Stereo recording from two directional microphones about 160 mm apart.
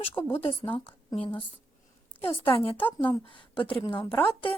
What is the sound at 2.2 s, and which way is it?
Speech, 15° left (ahead or behind).